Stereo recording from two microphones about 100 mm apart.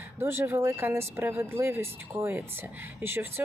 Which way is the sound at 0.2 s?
25° right (ahead or behind).